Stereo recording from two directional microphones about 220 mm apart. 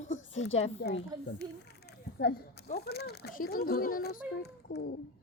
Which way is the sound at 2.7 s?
45° left (ahead or behind).